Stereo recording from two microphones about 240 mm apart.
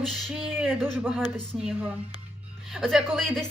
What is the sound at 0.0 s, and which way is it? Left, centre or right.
Speech, centre.